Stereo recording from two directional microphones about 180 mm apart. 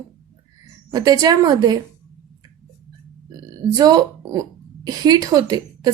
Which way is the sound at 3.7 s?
20° right (ahead or behind).